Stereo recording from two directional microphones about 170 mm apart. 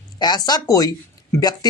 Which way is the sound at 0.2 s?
25° left (ahead or behind).